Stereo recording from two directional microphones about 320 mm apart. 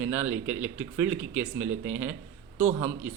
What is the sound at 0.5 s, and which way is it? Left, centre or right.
Speech, right.